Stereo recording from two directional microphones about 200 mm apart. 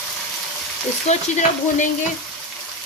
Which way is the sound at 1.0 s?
35° left (ahead or behind).